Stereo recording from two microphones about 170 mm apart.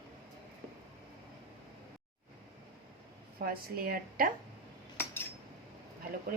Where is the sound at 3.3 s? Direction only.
60° right (ahead or behind).